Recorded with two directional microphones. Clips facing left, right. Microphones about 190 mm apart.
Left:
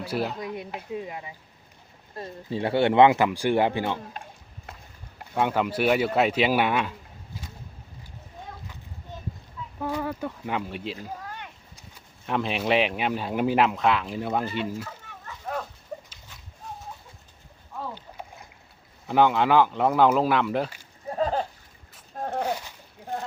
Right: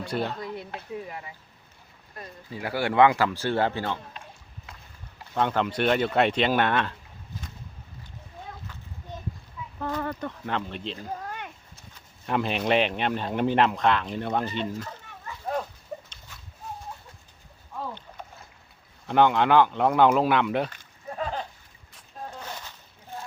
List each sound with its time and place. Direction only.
0.0 s speech: 5° left (ahead or behind)
5.3 s speech: 10° left (ahead or behind)
9.7 s speech: 10° left (ahead or behind)
12.2 s speech: centre (ahead or behind)
17.9 s boat: 10° left (ahead or behind)
19.0 s speech: 5° left (ahead or behind)
21.2 s a sound: 40° left (ahead or behind)
22.2 s a sound: 60° left (ahead or behind)